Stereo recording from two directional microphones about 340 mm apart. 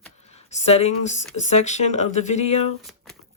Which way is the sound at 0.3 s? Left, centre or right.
Centre.